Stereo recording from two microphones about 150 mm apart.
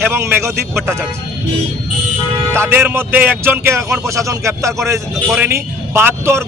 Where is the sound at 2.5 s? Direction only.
15° right (ahead or behind).